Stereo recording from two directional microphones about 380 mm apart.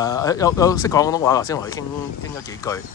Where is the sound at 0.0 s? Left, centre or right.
Centre.